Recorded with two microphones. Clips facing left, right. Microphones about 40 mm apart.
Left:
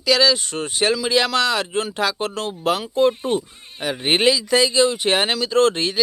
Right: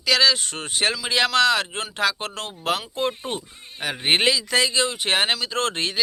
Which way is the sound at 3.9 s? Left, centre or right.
Right.